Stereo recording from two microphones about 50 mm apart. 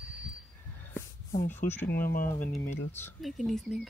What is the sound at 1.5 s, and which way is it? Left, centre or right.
Speech, left.